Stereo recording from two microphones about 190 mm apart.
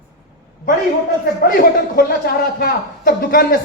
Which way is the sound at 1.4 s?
50° left (ahead or behind).